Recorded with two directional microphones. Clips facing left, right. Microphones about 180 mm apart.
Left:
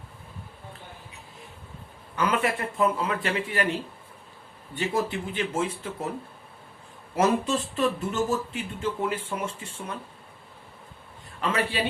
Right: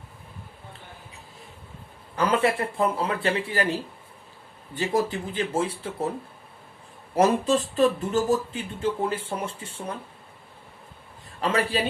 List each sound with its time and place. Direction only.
2.1 s speech: 35° right (ahead or behind)
7.2 s speech: 35° right (ahead or behind)
11.3 s a man's voice: 35° right (ahead or behind)